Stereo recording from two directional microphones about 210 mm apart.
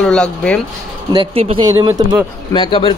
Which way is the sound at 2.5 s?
25° left (ahead or behind).